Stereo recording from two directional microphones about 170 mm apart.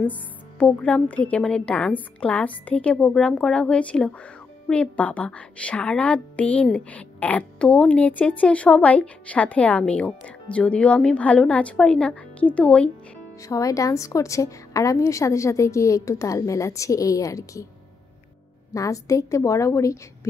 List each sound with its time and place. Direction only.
0.6 s a woman's voice: 5° left (ahead or behind)
13.4 s a woman's voice: 20° left (ahead or behind)
18.7 s a woman's voice: 20° left (ahead or behind)